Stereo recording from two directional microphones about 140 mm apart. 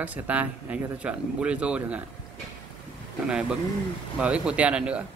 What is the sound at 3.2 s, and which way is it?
A man's voice, 5° right (ahead or behind).